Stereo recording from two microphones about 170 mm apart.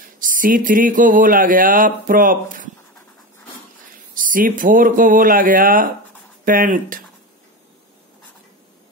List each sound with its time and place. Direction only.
0.2 s speech: 50° right (ahead or behind)
4.1 s speech: 55° right (ahead or behind)